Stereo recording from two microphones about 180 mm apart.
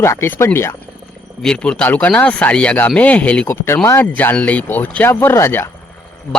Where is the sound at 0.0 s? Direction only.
15° left (ahead or behind).